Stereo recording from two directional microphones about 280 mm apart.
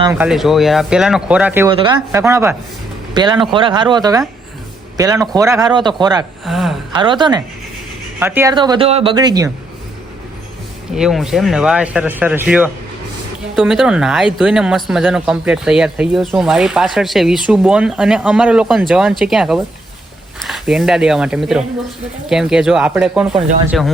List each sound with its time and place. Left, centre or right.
0.0 s speech: centre
6.4 s gasp: centre
6.9 s speech: centre
10.9 s speech: centre